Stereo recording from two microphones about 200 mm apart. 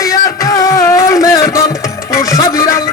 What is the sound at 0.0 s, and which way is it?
Music, 15° left (ahead or behind).